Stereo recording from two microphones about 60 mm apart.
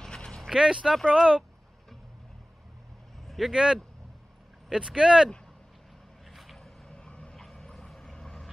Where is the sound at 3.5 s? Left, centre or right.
Centre.